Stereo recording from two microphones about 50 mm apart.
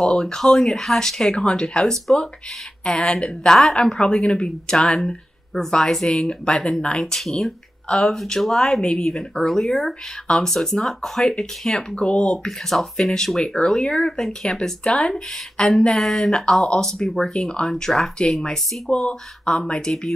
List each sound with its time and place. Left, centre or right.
0.2 s speech: centre
7.2 s speech: centre
14.9 s speech: centre
17.0 s speech: centre